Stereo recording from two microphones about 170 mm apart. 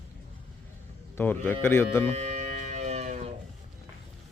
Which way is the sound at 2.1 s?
45° right (ahead or behind).